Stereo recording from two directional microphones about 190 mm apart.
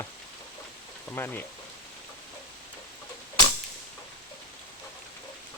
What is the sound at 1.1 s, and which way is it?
Speech, 10° left (ahead or behind).